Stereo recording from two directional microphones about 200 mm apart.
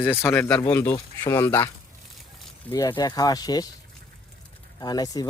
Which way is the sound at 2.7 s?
20° left (ahead or behind).